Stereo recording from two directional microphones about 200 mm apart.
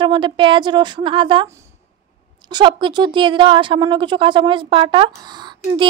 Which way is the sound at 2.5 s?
20° right (ahead or behind).